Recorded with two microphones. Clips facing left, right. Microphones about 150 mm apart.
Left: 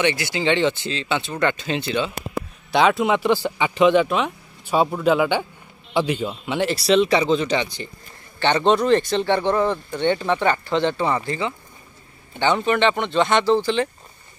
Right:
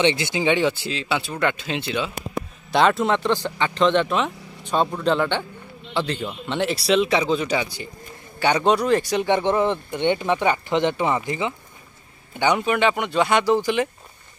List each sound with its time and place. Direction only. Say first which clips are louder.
0.0 s speech: right 1 dB; 20° right (ahead or behind)